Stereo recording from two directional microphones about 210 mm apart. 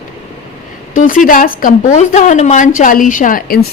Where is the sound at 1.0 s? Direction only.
40° left (ahead or behind).